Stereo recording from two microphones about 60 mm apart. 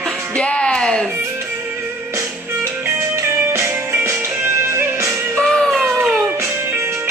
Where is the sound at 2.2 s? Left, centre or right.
Right.